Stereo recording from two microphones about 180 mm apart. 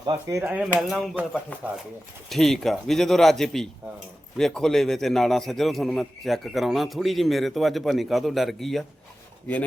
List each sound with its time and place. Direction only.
0.0 s speech: 25° right (ahead or behind)
0.3 s a man's voice: 5° right (ahead or behind)
2.3 s a man's voice: centre (ahead or behind)